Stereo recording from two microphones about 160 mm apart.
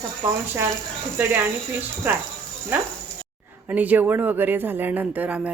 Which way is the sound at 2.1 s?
15° right (ahead or behind).